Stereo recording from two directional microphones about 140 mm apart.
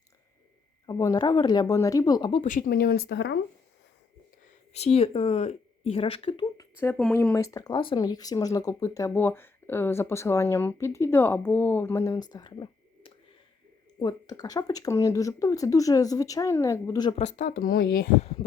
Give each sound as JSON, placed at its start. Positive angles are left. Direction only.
{"t": 0.9, "sound": "speech", "side_deg": 25}
{"t": 2.3, "sound": "speech", "side_deg": 65}
{"t": 4.7, "sound": "a woman's voice", "side_deg": 50}
{"t": 6.6, "sound": "speech", "side_deg": 20}
{"t": 17.2, "sound": "speech", "side_deg": 60}